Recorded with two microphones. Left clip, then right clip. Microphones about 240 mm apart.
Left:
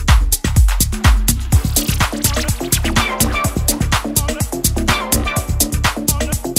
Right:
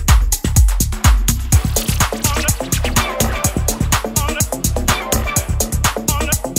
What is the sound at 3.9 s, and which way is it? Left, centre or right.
Music, centre.